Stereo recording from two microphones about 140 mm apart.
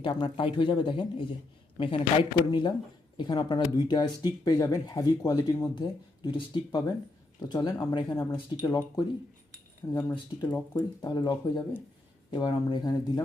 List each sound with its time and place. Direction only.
0.0 s speech: 35° left (ahead or behind)
2.4 s speech: 35° left (ahead or behind)